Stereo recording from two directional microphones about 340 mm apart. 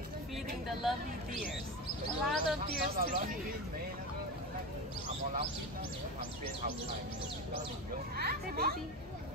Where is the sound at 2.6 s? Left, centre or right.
Centre.